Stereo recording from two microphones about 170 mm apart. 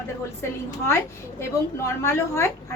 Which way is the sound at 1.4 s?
15° left (ahead or behind).